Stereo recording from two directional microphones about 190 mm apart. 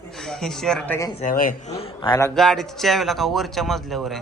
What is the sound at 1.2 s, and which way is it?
A man's voice, 45° left (ahead or behind).